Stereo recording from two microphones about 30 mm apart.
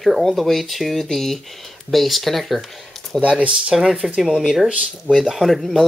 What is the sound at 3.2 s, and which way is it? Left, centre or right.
Speech, right.